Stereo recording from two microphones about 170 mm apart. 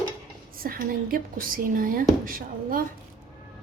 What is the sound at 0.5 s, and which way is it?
Speech, 60° right (ahead or behind).